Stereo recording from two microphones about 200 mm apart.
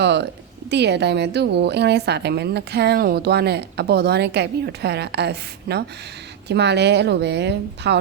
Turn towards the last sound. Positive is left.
turn(degrees=-60)  # may be behind; listen again after turning